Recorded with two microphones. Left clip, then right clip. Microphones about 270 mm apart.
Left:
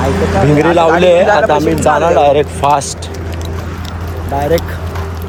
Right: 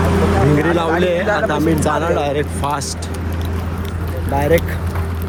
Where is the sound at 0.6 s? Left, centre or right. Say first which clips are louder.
Left 8 dB; centre.